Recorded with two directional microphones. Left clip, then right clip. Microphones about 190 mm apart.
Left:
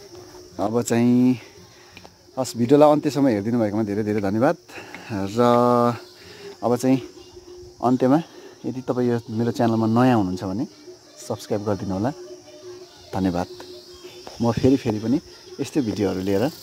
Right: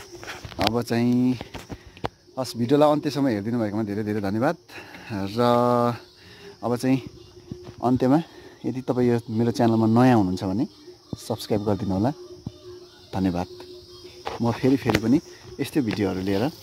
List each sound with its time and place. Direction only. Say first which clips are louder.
0.8 s speech: left 4 dB; 5° left (ahead or behind)
2.5 s speech: left 4 dB; 10° left (ahead or behind)